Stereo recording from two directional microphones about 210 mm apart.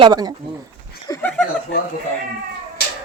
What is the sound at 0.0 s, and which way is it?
Speech, 20° right (ahead or behind).